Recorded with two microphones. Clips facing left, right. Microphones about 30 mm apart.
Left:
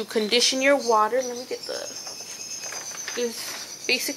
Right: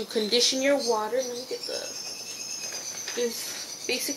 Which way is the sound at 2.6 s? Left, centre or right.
Left.